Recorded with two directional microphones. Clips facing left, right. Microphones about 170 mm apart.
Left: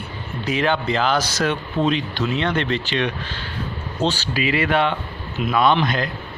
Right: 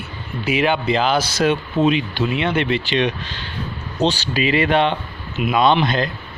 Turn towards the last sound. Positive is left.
turn(degrees=-25)  # may be behind; listen again after turning